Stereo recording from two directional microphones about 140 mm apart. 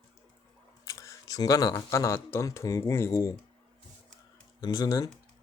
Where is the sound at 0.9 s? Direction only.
25° left (ahead or behind).